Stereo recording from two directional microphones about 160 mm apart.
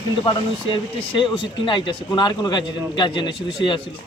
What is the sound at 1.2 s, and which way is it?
A man's voice, 30° left (ahead or behind).